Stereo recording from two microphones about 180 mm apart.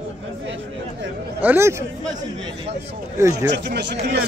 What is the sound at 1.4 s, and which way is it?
Speech, 10° right (ahead or behind).